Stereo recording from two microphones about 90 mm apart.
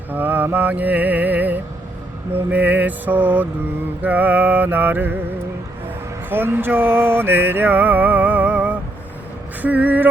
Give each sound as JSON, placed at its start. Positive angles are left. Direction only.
{"t": 0.1, "sound": "music", "side_deg": -20}
{"t": 6.3, "sound": "music", "side_deg": -25}